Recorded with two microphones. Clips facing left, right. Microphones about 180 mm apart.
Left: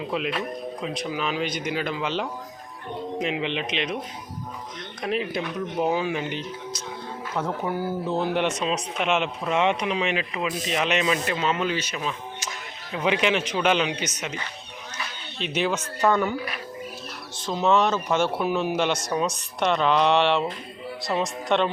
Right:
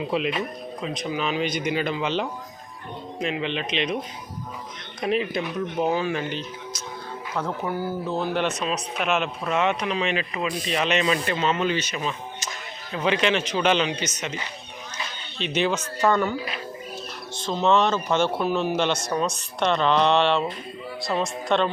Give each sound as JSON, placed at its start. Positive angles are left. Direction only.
{"t": 0.1, "sound": "speech", "side_deg": 0}
{"t": 3.2, "sound": "speech", "side_deg": 15}
{"t": 4.9, "sound": "speech", "side_deg": 0}
{"t": 5.7, "sound": "a man's voice", "side_deg": 10}
{"t": 15.4, "sound": "speech", "side_deg": 5}
{"t": 17.7, "sound": "speech", "side_deg": 5}